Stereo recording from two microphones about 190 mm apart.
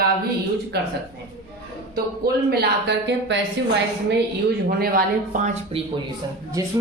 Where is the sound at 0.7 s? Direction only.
60° right (ahead or behind).